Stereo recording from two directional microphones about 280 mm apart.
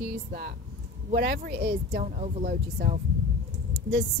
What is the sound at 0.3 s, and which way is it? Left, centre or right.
Speech, right.